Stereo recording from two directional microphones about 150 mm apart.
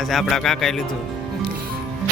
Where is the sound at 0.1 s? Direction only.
Centre (ahead or behind).